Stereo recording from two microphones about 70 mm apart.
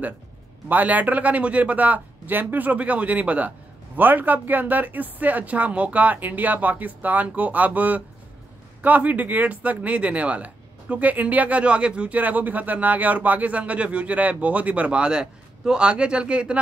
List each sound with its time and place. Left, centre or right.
0.7 s speech: right